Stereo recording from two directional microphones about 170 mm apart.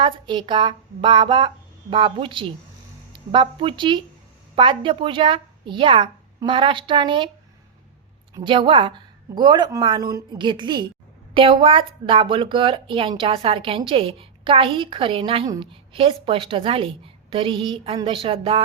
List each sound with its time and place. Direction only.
0.0 s a woman's voice: 30° right (ahead or behind)
8.4 s a woman's voice: 30° right (ahead or behind)